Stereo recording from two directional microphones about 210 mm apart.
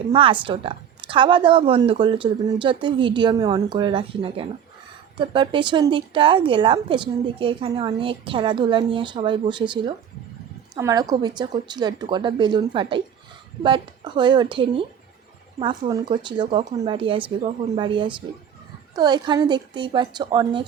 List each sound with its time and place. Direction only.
0.1 s speech: 25° right (ahead or behind)